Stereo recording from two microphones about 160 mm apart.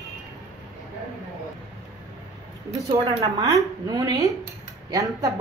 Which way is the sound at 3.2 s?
20° right (ahead or behind).